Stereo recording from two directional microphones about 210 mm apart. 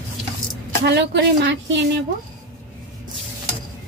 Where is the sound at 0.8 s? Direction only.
55° right (ahead or behind).